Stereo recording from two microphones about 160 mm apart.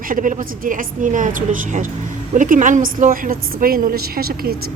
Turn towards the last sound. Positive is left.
turn(degrees=-70)  # may be behind; listen again after turning